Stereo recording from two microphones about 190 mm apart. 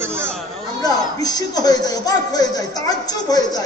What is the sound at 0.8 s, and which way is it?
A man's voice, 20° left (ahead or behind).